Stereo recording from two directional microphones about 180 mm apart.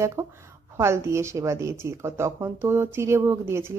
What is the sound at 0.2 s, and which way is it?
A woman's voice, 15° right (ahead or behind).